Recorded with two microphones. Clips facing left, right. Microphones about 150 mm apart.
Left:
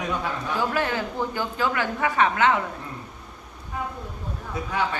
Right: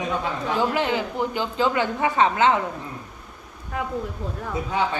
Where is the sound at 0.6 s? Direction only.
20° right (ahead or behind).